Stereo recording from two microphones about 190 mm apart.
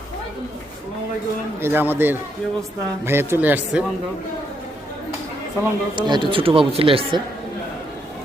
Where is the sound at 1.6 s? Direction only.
10° right (ahead or behind).